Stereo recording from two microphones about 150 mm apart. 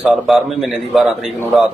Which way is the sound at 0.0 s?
Centre (ahead or behind).